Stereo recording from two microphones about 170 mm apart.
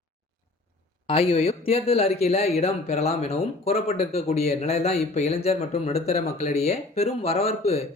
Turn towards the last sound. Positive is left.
turn(degrees=40)  # may be behind; listen again after turning